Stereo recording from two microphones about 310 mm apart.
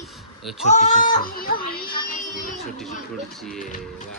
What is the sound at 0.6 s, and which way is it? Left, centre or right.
Speech, left.